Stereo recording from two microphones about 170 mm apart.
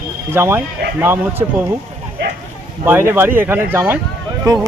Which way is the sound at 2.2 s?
80° right.